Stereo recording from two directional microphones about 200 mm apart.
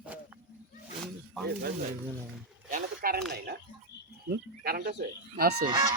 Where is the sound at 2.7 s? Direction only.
45° right (ahead or behind).